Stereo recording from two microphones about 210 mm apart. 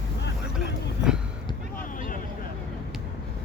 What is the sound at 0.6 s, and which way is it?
Vehicle, 5° right (ahead or behind).